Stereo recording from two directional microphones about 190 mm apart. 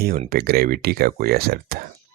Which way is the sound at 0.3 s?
55° right (ahead or behind).